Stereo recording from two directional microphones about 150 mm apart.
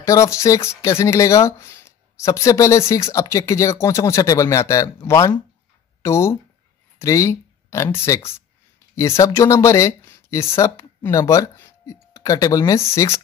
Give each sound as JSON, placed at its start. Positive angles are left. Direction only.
{"t": 0.0, "sound": "speech", "side_deg": 20}